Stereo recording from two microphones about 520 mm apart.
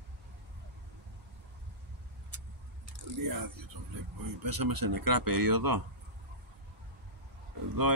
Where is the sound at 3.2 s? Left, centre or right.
Right.